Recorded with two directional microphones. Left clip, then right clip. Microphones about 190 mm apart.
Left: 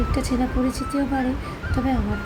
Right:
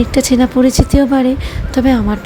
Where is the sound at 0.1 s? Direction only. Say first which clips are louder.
Right 12 dB; 60° right (ahead or behind).